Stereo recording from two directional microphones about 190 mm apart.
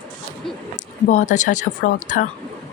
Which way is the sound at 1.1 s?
40° left (ahead or behind).